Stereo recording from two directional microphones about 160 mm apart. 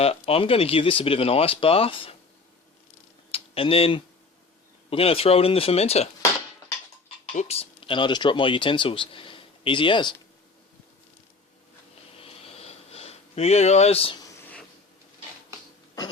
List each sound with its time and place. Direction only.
0.0 s speech: 40° left (ahead or behind)
3.3 s speech: 35° left (ahead or behind)
7.3 s speech: 40° left (ahead or behind)
12.2 s sniff: 40° left (ahead or behind)